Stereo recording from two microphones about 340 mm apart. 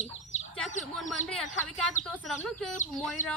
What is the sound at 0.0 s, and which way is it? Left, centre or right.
Bird, centre.